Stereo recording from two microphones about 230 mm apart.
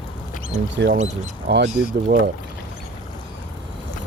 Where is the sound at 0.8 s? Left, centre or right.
Right.